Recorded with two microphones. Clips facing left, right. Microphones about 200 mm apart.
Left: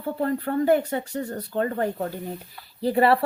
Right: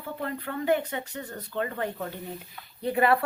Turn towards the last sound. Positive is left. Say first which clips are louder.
# left 4 dB
turn(degrees=30)  # may be behind; listen again after turning